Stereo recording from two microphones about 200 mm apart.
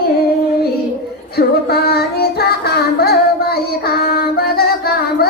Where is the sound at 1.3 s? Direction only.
50° left (ahead or behind).